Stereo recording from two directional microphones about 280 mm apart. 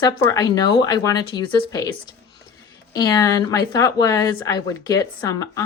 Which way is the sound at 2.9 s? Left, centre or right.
Centre.